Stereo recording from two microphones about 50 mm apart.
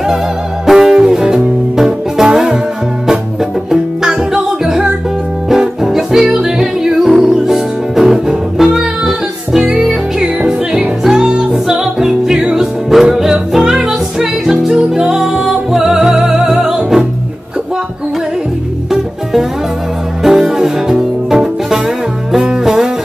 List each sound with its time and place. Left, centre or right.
0.7 s music: centre
3.7 s music: centre
20.2 s music: centre